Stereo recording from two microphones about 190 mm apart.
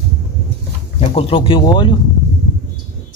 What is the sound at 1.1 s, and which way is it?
Speech, 30° left (ahead or behind).